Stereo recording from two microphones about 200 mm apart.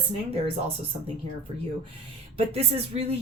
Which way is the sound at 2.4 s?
30° right (ahead or behind).